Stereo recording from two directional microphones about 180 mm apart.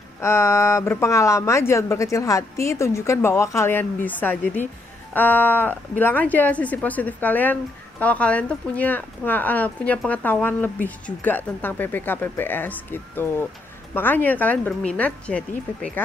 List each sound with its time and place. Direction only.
0.2 s speech: 15° left (ahead or behind)